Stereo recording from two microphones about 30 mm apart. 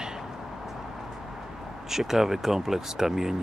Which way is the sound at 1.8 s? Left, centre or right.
Centre.